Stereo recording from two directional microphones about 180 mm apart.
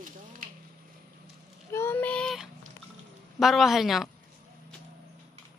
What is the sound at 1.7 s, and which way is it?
Child singing, 10° left (ahead or behind).